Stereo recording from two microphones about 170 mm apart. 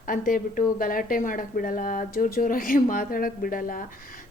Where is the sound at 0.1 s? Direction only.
55° left (ahead or behind).